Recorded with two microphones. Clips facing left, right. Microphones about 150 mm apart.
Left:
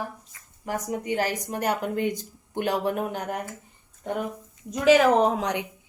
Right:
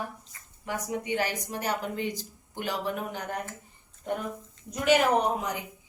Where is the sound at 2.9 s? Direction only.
45° left (ahead or behind).